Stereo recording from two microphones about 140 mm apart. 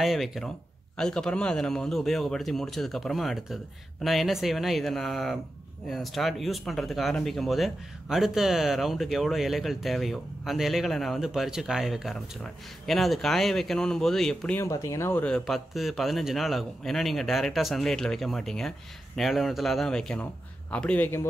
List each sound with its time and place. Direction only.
0.0 s speech: centre (ahead or behind)
14.6 s speech: 20° left (ahead or behind)
15.2 s speech: 5° left (ahead or behind)